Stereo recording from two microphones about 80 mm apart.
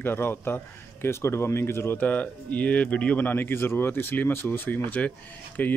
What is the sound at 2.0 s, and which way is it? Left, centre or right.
Speech, centre.